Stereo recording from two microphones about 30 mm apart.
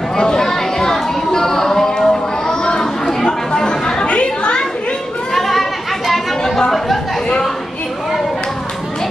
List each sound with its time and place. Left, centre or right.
0.2 s a sound: left
2.6 s chatter: left
4.0 s chatter: left
5.3 s chatter: centre